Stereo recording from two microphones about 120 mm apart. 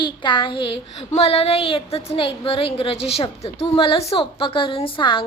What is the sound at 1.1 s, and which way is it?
A woman's voice, 60° left (ahead or behind).